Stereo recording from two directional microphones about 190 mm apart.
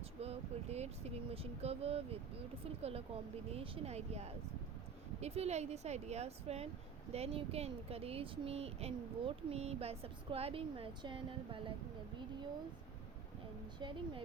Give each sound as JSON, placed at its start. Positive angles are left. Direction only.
{"t": 0.2, "sound": "speech", "side_deg": -35}
{"t": 13.7, "sound": "a woman's voice", "side_deg": -25}